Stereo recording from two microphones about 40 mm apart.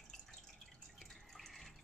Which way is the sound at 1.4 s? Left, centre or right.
Centre.